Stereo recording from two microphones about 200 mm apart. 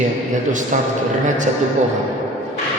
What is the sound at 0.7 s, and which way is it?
Speech, 40° right (ahead or behind).